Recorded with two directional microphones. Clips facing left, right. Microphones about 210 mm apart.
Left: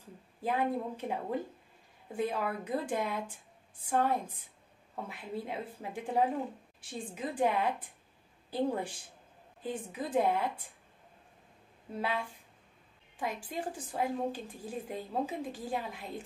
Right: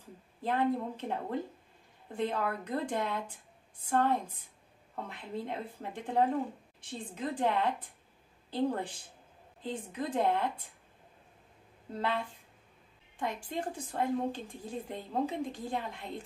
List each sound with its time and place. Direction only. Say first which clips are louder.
0.4 s a woman's voice: right 1 dB; 10° left (ahead or behind)
11.9 s a woman's voice: right 1 dB; 10° left (ahead or behind)
13.2 s a woman's voice: right 1 dB; 5° left (ahead or behind)